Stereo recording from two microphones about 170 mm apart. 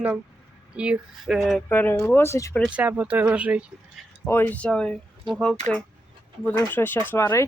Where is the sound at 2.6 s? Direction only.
10° right (ahead or behind).